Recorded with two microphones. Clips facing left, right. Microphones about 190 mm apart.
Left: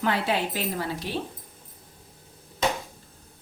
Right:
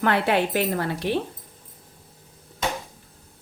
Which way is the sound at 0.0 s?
60° right (ahead or behind).